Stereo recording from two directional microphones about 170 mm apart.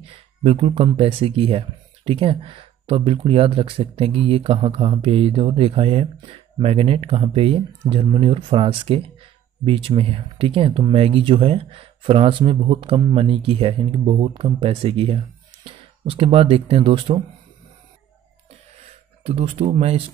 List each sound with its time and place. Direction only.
0.0 s speech: 35° right (ahead or behind)
19.2 s speech: 35° right (ahead or behind)